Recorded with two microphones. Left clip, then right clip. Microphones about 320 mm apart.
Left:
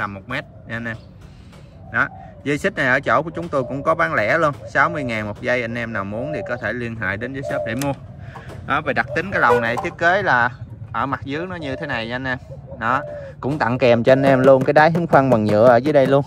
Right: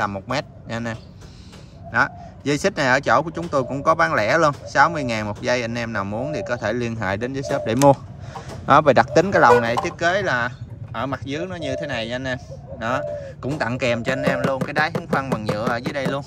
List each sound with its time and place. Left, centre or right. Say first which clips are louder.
0.0 s speech: right 2 dB; centre